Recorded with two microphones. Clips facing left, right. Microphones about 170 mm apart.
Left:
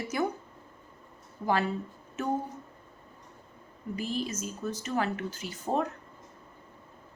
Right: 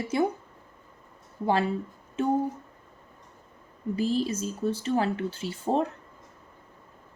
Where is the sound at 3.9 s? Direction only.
30° right (ahead or behind).